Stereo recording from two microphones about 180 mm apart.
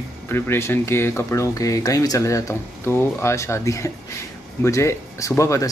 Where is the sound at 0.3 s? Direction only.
15° left (ahead or behind).